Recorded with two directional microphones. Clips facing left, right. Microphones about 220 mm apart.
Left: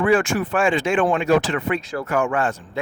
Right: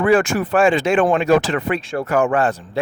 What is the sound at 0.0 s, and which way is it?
Speech, 40° right (ahead or behind).